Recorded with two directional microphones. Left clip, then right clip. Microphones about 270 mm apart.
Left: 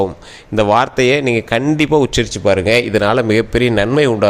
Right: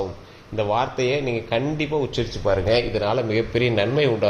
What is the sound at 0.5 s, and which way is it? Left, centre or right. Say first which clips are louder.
A man's voice: left 10 dB; left.